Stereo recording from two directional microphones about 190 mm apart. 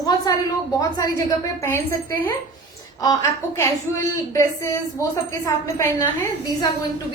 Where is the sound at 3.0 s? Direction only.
15° left (ahead or behind).